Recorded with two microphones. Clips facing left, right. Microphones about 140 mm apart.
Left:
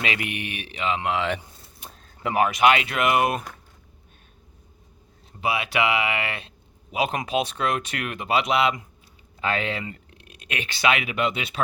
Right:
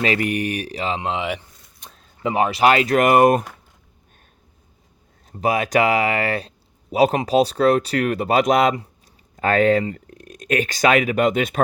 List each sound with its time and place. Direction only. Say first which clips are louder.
0.0 s speech: right 8 dB; 40° right (ahead or behind); by 1.3 s 25° right (ahead or behind)
1.8 s keys jangling: left 1 dB; 5° left (ahead or behind)
2.2 s speech: right 2 dB; 25° right (ahead or behind); by 3.4 s 45° right (ahead or behind)
5.4 s speech: right 6 dB; 45° right (ahead or behind)